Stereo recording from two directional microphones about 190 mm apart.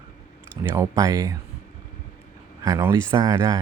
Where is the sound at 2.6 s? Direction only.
15° right (ahead or behind).